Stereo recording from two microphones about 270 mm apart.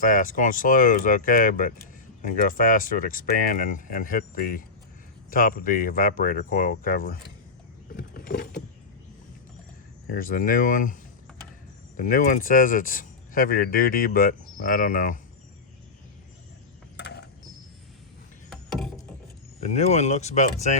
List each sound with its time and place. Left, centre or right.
0.0 s speech: left
7.9 s vehicle: left
10.1 s speech: left
11.9 s speech: left
17.0 s a sound: left
18.5 s a sound: centre
19.5 s speech: left